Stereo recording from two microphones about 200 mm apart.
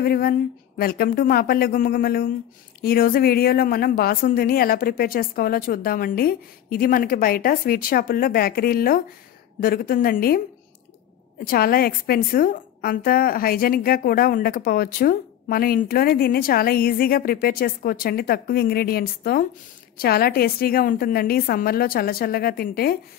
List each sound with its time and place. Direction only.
0.0 s a woman's voice: 50° left (ahead or behind)